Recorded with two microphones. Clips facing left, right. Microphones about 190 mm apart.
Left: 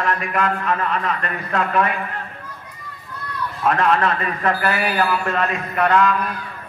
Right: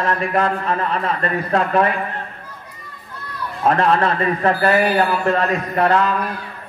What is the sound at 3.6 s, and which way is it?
A man's voice, 35° right (ahead or behind).